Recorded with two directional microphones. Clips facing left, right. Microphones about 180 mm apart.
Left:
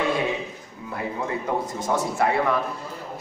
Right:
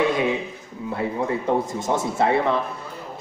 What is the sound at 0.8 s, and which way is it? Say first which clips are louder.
A man's voice: right 4 dB; 25° right (ahead or behind).